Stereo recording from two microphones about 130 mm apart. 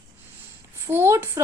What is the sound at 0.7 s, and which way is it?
Speech, 20° right (ahead or behind).